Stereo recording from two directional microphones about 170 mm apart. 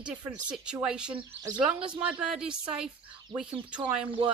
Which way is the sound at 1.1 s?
25° right (ahead or behind).